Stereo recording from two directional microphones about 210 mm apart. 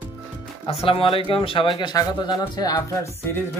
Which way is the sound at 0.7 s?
25° left (ahead or behind).